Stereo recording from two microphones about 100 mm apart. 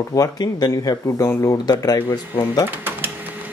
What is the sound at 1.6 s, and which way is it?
Speech, 40° left (ahead or behind).